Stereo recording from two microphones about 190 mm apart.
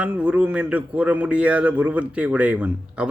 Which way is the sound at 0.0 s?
5° right (ahead or behind).